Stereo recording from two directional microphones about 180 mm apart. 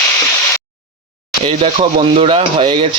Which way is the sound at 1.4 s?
30° right (ahead or behind).